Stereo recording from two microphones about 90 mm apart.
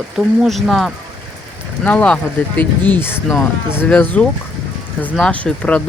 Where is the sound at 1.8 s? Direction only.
15° left (ahead or behind).